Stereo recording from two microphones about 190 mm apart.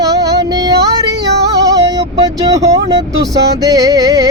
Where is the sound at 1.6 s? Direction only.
20° right (ahead or behind).